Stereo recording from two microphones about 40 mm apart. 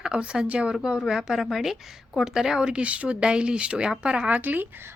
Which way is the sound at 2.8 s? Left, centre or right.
Right.